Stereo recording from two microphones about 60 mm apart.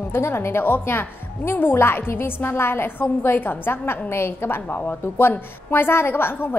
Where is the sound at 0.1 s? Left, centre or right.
Left.